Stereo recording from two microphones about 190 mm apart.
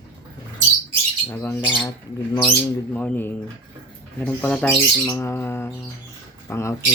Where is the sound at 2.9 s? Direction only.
10° left (ahead or behind).